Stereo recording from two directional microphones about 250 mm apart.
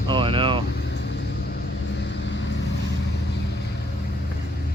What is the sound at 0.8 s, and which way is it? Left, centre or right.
Vehicle, left.